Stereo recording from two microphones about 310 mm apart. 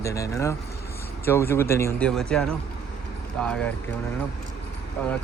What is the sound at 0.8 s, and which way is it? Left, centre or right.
Vehicle, left.